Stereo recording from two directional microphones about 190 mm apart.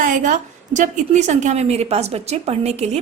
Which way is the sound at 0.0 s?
40° right (ahead or behind).